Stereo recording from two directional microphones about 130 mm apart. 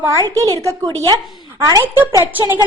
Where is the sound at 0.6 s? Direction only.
25° right (ahead or behind).